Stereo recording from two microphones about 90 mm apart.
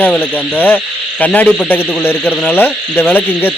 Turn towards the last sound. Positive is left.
turn(degrees=20)  # may be behind; listen again after turning